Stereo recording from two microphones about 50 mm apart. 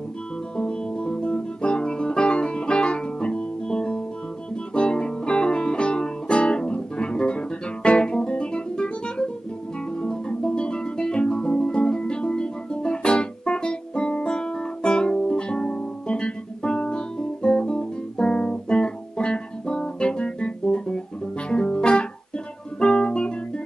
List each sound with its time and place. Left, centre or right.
0.6 s guitar: centre
4.7 s music: left
21.5 s guitar: centre
22.8 s music: centre